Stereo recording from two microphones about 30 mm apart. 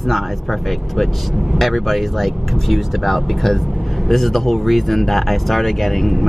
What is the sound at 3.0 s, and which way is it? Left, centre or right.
Speech, centre.